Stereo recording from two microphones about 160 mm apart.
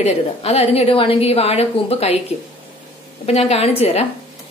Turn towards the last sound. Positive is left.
turn(degrees=40)  # may be behind; listen again after turning